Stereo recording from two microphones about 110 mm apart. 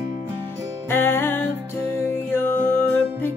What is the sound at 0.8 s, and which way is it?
Music, 20° left (ahead or behind).